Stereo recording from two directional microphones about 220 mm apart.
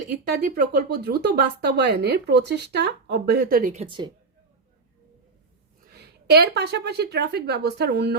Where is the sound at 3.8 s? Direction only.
20° right (ahead or behind).